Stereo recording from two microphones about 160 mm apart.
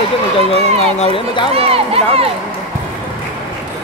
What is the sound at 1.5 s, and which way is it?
Speech, 40° right (ahead or behind).